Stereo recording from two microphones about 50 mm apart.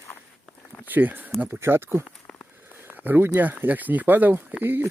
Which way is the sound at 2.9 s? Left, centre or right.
Right.